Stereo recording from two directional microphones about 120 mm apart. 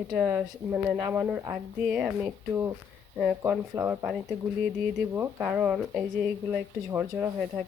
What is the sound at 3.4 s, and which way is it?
Speech, 20° right (ahead or behind).